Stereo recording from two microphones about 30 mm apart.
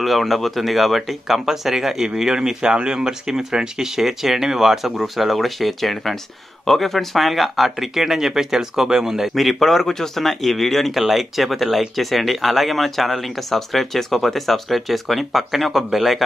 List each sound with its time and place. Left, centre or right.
0.0 s speech: centre
2.2 s speech: right
9.3 s speech: centre
10.9 s speech: centre